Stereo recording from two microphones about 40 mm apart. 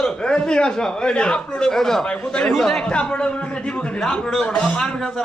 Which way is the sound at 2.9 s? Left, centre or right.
Left.